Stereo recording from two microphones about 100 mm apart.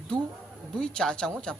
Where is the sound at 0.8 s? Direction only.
10° left (ahead or behind).